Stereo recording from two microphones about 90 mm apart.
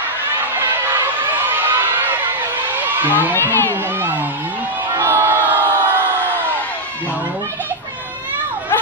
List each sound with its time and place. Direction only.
1.6 s a sound: 20° right (ahead or behind)
3.3 s speech: 25° left (ahead or behind)
5.0 s crowd: 25° right (ahead or behind)